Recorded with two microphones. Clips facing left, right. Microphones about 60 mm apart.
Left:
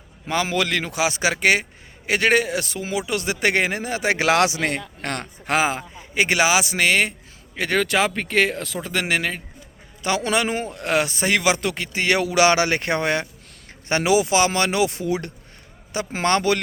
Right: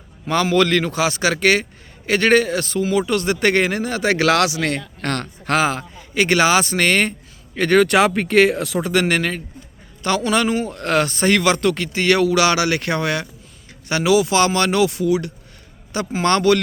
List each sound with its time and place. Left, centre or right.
0.5 s a man's voice: centre
10.0 s a man's voice: centre; by 15.3 s left
16.2 s speech: centre